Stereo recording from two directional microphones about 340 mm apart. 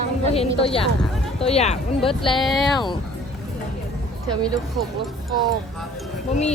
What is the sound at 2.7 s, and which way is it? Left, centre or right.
Speech, centre.